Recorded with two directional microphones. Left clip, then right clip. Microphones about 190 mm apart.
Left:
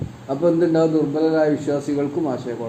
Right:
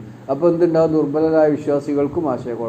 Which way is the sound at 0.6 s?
15° right (ahead or behind).